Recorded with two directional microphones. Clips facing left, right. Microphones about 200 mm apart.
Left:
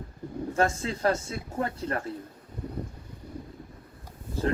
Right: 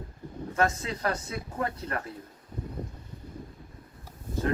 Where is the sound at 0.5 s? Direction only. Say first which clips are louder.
Left 1 dB; 30° left (ahead or behind).